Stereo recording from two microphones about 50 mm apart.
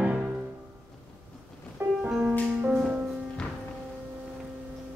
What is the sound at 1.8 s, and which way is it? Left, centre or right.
Music, right.